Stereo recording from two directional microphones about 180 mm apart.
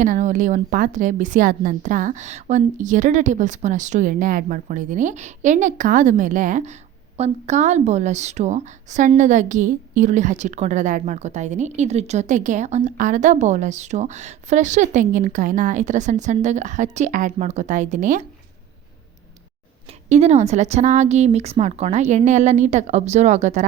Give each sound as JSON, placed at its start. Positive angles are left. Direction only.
{"t": 0.0, "sound": "a woman's voice", "side_deg": -45}
{"t": 20.1, "sound": "a woman's voice", "side_deg": -40}